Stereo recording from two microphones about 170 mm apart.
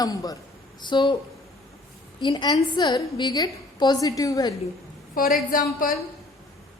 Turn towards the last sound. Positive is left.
turn(degrees=55)  # may be behind; listen again after turning